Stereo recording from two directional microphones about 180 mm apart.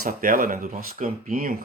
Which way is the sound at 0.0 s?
50° right (ahead or behind).